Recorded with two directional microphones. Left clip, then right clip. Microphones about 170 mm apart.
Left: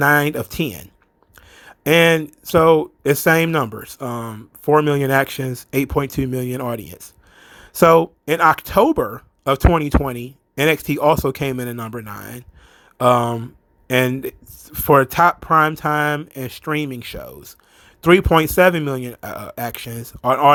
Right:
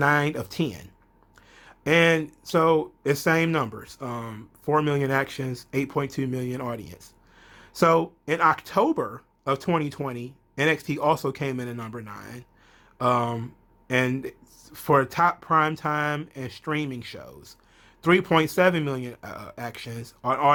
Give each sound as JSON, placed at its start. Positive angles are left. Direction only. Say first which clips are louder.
{"t": 0.0, "sound": "speech", "louder": "left 7 dB", "side_deg": 40}
{"t": 1.4, "sound": "a sound", "louder": "left 7 dB", "side_deg": 40}
{"t": 2.4, "sound": "speech", "louder": "left 9 dB", "side_deg": 40}